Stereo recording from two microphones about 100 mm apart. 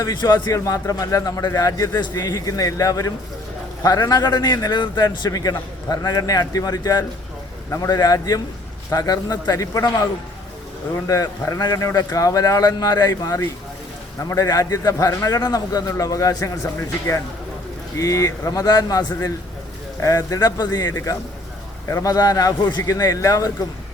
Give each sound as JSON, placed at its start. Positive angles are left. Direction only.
{"t": 0.0, "sound": "a man's voice", "side_deg": 45}
{"t": 18.0, "sound": "a man's voice", "side_deg": 35}